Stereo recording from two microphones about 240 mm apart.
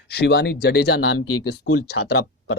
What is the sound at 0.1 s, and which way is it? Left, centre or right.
Speech, left.